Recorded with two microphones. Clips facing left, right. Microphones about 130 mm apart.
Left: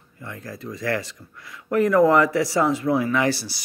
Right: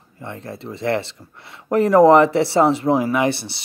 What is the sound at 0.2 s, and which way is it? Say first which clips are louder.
Speech: right 3 dB; 30° right (ahead or behind).